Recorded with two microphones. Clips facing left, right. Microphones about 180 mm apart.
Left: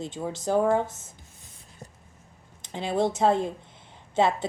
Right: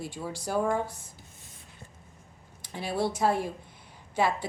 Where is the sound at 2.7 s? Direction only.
20° left (ahead or behind).